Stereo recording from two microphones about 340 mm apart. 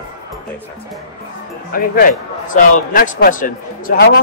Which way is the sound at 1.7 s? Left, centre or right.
Left.